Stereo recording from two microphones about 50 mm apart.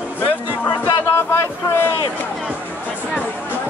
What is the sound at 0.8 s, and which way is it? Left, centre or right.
Music, left.